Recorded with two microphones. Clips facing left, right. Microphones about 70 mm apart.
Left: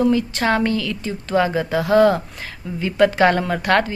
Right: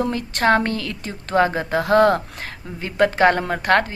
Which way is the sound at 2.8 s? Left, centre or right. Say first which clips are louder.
Left 2 dB; right.